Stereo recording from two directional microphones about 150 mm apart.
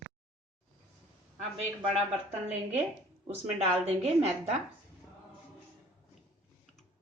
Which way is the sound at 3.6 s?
45° right (ahead or behind).